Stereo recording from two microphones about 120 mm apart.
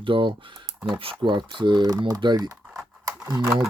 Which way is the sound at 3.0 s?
35° right (ahead or behind).